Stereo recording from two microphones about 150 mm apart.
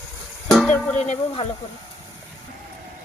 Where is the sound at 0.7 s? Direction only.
10° left (ahead or behind).